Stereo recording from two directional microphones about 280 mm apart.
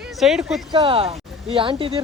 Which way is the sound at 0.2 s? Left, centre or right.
Centre.